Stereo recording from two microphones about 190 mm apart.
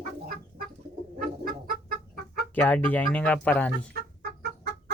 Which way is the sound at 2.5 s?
5° left (ahead or behind).